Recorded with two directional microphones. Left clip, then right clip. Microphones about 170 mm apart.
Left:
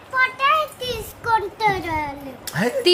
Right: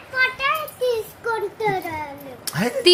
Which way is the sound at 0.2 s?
55° left (ahead or behind).